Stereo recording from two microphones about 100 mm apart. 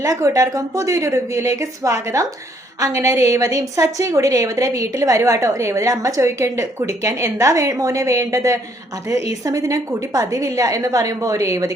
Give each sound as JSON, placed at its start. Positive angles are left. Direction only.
{"t": 0.0, "sound": "a woman's voice", "side_deg": -30}